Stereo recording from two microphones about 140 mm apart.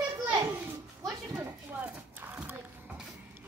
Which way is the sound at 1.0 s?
15° right (ahead or behind).